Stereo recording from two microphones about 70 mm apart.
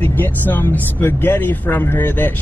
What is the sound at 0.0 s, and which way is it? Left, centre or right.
Speech, left.